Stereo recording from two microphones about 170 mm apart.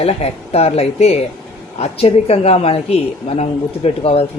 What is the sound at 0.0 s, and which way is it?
A man's voice, 40° left (ahead or behind).